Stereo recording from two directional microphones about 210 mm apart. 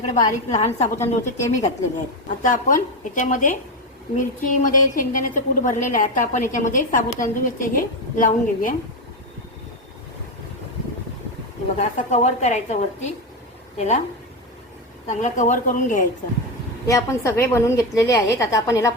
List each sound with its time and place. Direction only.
0.1 s a woman's voice: 35° left (ahead or behind)
0.9 s a woman's voice: 10° left (ahead or behind)
2.4 s a woman's voice: 40° left (ahead or behind)
11.8 s a woman's voice: 35° left (ahead or behind)
15.1 s a woman's voice: 35° left (ahead or behind)
16.8 s a woman's voice: 15° left (ahead or behind)